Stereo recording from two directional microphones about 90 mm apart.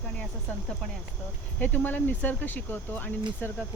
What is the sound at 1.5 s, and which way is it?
Speech, 15° left (ahead or behind).